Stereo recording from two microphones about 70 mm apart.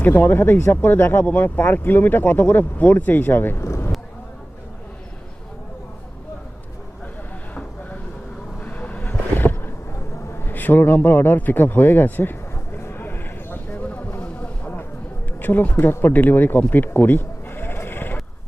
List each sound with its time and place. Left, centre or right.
0.0 s speech: left
8.6 s a sound: left
15.4 s speech: left